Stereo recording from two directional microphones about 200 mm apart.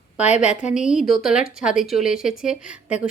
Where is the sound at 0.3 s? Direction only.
35° left (ahead or behind).